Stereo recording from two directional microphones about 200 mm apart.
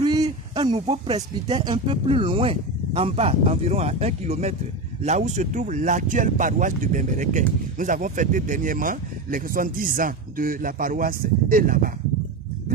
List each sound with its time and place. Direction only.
0.0 s speech: 20° right (ahead or behind); by 11.9 s 45° right (ahead or behind)